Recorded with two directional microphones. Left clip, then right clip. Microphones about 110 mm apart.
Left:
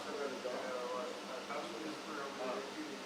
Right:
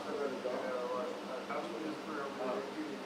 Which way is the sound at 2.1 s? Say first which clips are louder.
Right 3 dB; 20° right (ahead or behind).